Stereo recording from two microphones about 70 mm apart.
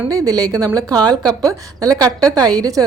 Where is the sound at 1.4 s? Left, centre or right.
Right.